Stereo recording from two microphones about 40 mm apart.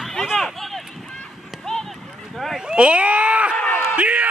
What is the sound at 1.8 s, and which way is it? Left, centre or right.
Clip-clop, centre.